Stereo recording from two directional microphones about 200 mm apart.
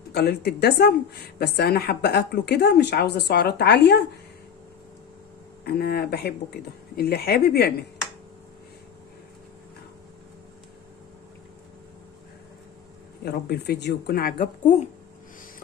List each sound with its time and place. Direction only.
0.1 s speech: 55° left (ahead or behind)
5.6 s speech: 50° left (ahead or behind)
13.2 s speech: 55° left (ahead or behind); by 14.8 s 35° left (ahead or behind)